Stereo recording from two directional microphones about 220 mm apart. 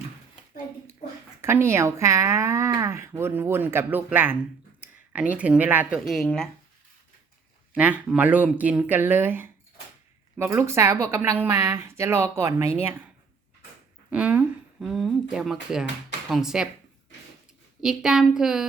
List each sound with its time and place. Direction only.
1.4 s speech: 10° right (ahead or behind)
7.7 s speech: 5° right (ahead or behind)
14.1 s speech: 5° right (ahead or behind)
17.7 s speech: centre (ahead or behind)